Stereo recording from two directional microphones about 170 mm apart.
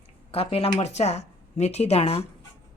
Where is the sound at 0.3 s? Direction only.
35° left (ahead or behind).